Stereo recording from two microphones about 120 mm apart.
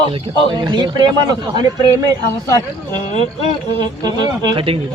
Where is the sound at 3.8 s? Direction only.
35° right (ahead or behind).